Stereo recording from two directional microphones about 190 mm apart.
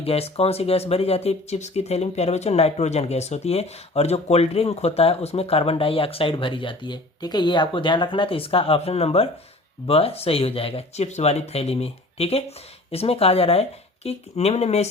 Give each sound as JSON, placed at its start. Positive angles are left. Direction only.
{"t": 0.0, "sound": "speech", "side_deg": 30}